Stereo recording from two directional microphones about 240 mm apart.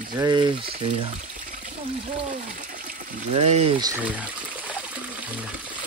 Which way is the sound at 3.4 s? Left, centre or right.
Right.